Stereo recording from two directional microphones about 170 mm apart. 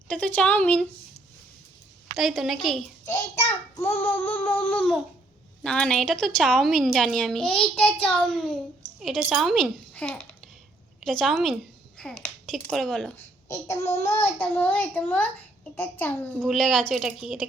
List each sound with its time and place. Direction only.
0.1 s a child's voice: 10° left (ahead or behind)
2.1 s a woman's voice: centre (ahead or behind)
3.1 s a child's voice: 15° left (ahead or behind); by 17.4 s centre (ahead or behind)